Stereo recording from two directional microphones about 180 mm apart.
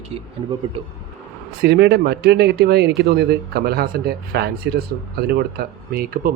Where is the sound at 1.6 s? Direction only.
65° right (ahead or behind).